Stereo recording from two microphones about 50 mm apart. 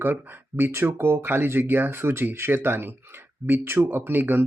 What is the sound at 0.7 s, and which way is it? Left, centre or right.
Speech, right.